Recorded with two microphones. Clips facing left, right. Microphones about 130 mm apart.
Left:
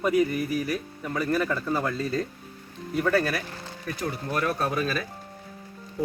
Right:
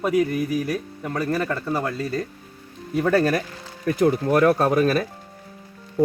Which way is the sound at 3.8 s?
60° right (ahead or behind).